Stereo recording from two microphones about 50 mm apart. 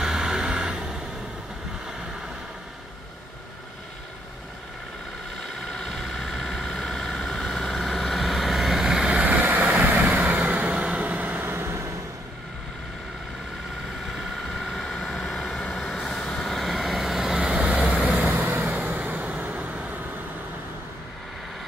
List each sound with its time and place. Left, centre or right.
0.0 s vehicle: centre
5.6 s vehicle: centre
9.2 s vehicle: right
14.6 s vehicle: centre
14.9 s vehicle: centre
17.6 s vehicle: right